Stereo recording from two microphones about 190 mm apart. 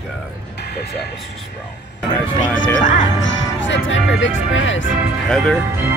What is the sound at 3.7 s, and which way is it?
Speech, 80° left.